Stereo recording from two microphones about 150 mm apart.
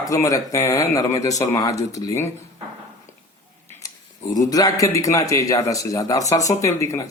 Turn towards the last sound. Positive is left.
turn(degrees=20)  # may be behind; listen again after turning